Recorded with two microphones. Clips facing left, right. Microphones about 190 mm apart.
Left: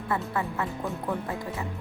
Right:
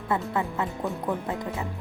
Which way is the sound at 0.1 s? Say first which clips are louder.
Right 2 dB; 20° right (ahead or behind).